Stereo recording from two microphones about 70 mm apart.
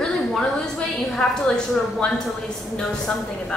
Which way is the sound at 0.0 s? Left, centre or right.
Centre.